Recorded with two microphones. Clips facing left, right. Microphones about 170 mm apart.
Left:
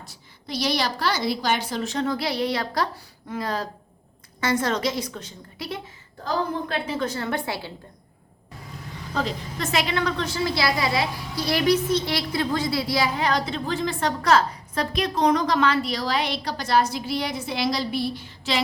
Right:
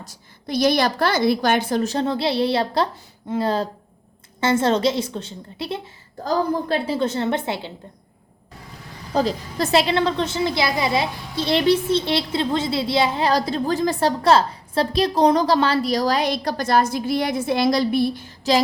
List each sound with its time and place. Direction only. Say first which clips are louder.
0.0 s a woman's voice: right 6 dB; 45° right (ahead or behind); by 7.7 s 20° right (ahead or behind)
9.1 s a woman's voice: right 7 dB; 35° right (ahead or behind)